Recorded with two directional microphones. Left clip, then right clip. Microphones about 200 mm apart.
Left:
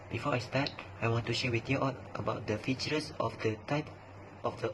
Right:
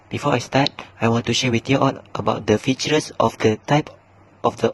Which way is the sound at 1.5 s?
50° right (ahead or behind).